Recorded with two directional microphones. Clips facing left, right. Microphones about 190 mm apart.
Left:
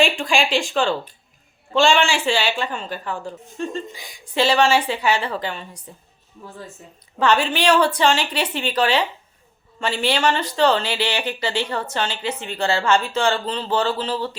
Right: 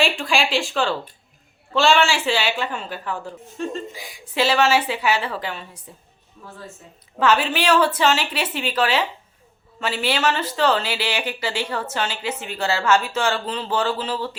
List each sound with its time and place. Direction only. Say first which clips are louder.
0.0 s a woman's voice: left 2 dB; centre (ahead or behind)
7.2 s a woman's voice: left 1 dB; 5° right (ahead or behind)